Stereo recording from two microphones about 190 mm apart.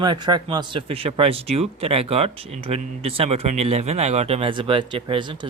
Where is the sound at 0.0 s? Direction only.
20° right (ahead or behind).